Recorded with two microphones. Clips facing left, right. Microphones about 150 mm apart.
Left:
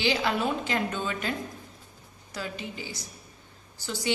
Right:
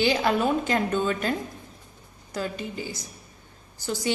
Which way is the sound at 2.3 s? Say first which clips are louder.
Right 5 dB; 45° right (ahead or behind).